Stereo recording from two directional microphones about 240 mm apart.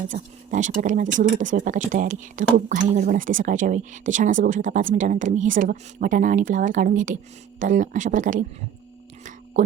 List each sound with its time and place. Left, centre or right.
0.1 s speech: right